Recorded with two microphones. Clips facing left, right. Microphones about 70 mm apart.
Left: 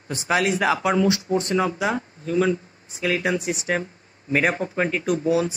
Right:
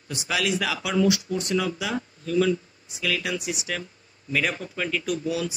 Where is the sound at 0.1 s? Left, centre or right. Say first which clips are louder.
Left 5 dB; left.